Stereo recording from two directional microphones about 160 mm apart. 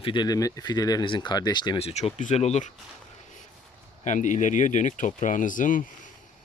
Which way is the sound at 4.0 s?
50° left (ahead or behind).